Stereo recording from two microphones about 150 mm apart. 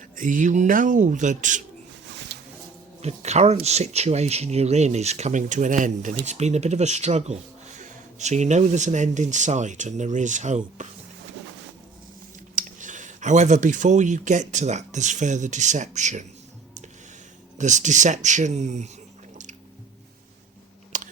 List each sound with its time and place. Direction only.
0.2 s speech: 60° right (ahead or behind)
2.3 s a sound: 90° right
3.0 s speech: 45° right (ahead or behind)
12.5 s speech: 60° right (ahead or behind)
17.6 s speech: 55° right (ahead or behind)
20.9 s a sound: 60° right (ahead or behind)